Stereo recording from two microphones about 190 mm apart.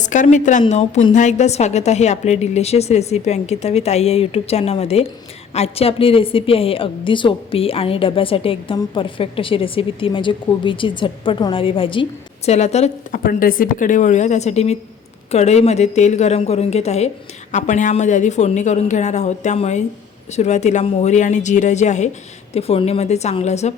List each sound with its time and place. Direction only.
0.0 s a woman's voice: 40° left (ahead or behind)